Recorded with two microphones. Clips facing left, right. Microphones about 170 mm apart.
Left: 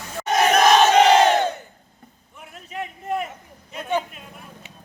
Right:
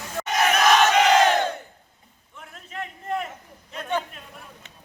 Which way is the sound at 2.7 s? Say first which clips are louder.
Left 2 dB; 10° left (ahead or behind).